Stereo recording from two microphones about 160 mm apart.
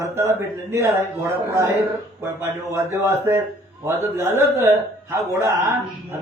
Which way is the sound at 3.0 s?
15° right (ahead or behind).